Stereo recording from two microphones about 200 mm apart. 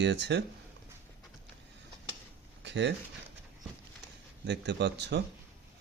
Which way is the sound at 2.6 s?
60° right (ahead or behind).